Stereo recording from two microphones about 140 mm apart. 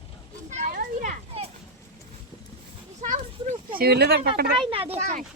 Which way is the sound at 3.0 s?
65° right (ahead or behind).